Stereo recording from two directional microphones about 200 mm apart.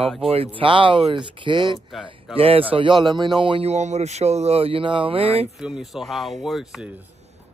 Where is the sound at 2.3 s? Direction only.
30° right (ahead or behind).